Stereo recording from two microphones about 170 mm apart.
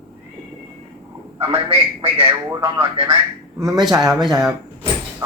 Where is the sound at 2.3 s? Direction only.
15° right (ahead or behind).